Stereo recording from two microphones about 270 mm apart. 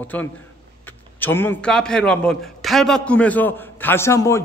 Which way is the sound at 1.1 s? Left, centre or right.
Centre.